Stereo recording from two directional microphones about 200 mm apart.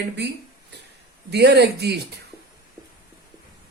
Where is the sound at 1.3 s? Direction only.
55° right (ahead or behind).